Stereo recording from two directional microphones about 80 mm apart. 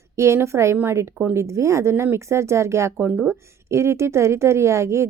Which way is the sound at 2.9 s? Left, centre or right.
Right.